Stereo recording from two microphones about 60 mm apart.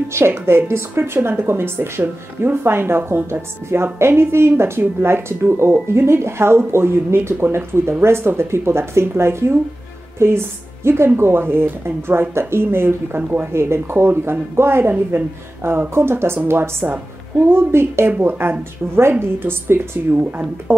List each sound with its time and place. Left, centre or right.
0.1 s a woman's voice: right
3.1 s a woman's voice: right
13.5 s a woman's voice: right